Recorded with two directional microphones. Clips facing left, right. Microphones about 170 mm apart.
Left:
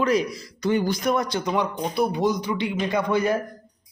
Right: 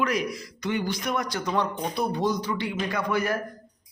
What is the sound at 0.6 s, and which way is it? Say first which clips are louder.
Speech: left 6 dB; 40° left (ahead or behind).